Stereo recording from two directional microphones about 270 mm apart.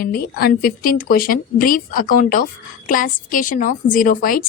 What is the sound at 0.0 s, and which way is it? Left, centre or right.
Speech, left.